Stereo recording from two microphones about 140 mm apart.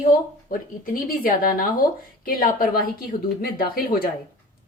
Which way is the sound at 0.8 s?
85° left.